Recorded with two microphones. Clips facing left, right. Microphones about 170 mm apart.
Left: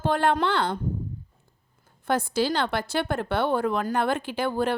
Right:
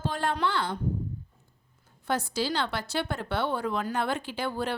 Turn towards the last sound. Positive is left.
turn(degrees=50)  # may be behind; listen again after turning